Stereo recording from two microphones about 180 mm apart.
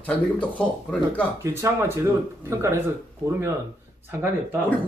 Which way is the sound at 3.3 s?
15° right (ahead or behind).